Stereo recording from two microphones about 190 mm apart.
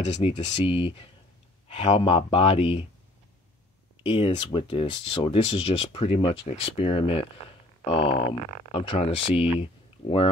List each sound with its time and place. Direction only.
0.1 s speech: 30° left (ahead or behind)
4.0 s speech: 30° left (ahead or behind)